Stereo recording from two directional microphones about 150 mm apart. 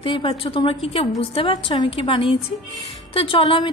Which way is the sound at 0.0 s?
35° left (ahead or behind).